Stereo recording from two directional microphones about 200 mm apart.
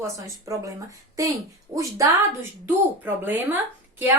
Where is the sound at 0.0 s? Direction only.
15° right (ahead or behind).